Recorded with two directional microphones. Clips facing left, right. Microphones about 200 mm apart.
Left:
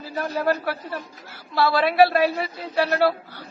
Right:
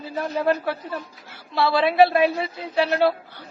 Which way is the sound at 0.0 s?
20° right (ahead or behind).